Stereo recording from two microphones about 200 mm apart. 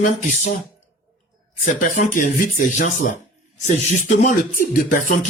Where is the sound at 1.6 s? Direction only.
40° left (ahead or behind).